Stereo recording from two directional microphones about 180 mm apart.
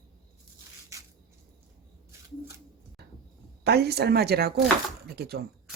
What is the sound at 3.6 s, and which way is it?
Speech, 65° right (ahead or behind).